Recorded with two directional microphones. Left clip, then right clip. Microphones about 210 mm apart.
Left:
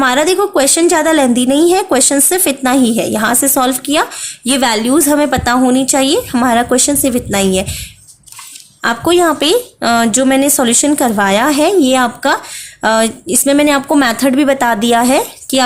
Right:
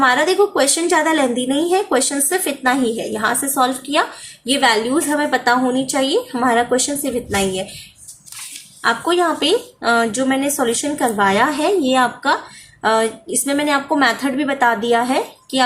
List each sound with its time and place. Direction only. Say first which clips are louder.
0.0 s a woman's voice: left 3 dB; 55° left (ahead or behind)
8.8 s a woman's voice: left 5 dB; 50° left (ahead or behind)